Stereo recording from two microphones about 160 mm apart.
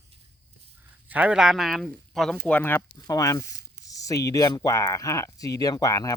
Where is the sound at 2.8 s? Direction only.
25° left (ahead or behind).